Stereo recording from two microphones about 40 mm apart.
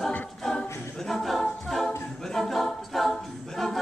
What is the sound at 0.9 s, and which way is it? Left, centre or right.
A capella, centre.